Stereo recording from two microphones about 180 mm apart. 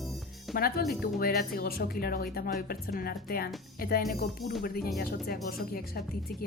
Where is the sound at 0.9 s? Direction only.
60° left (ahead or behind).